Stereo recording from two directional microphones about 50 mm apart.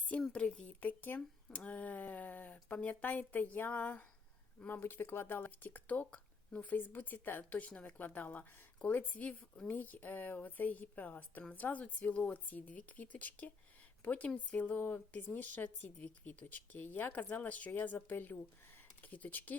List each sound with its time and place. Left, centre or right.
0.3 s speech: left
0.8 s a woman's voice: left